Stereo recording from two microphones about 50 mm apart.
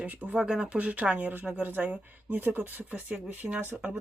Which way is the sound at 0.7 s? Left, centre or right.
Right.